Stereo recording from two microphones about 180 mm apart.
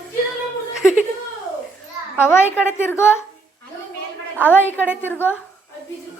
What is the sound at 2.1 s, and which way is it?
Speech, 15° left (ahead or behind).